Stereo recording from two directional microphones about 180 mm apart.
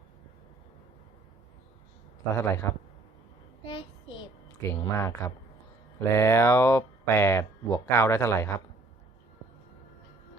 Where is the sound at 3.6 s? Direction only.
30° left (ahead or behind).